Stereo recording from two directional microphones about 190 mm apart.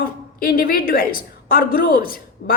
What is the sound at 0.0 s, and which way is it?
A woman's voice, 50° left (ahead or behind).